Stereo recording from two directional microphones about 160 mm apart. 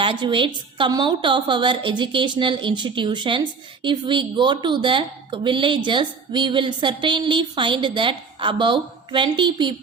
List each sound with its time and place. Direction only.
0.0 s a woman's voice: 30° right (ahead or behind)